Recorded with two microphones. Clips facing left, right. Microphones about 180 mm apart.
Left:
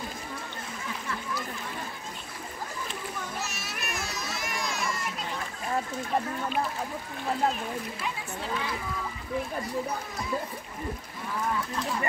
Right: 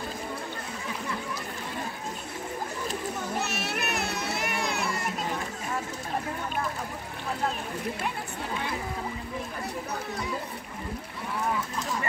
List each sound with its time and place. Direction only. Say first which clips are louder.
3.3 s music: right 6 dB; 65° right (ahead or behind)